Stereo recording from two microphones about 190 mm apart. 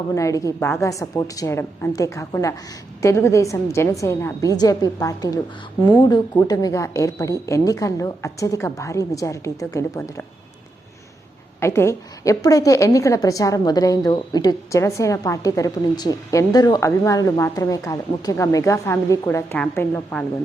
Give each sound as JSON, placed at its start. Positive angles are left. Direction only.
{"t": 0.1, "sound": "a woman's voice", "side_deg": 15}
{"t": 11.6, "sound": "a woman's voice", "side_deg": 15}